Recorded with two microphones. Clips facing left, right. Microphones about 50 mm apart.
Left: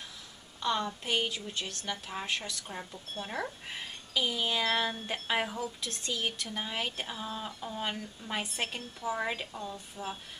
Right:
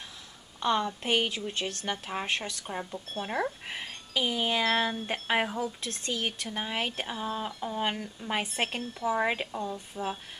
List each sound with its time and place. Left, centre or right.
0.6 s a woman's voice: right
2.7 s speech: centre